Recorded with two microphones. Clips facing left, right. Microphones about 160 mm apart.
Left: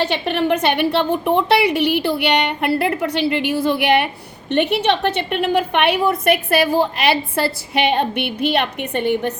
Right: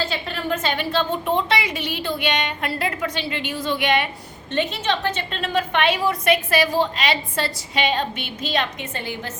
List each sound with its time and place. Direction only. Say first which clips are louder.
0.0 s a woman's voice: left 8 dB; 70° left (ahead or behind)